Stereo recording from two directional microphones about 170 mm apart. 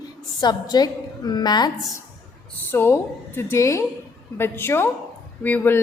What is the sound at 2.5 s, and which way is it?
A woman's voice, 15° left (ahead or behind).